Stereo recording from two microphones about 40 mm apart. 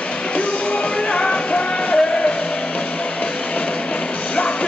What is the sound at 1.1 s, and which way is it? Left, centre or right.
Music, left.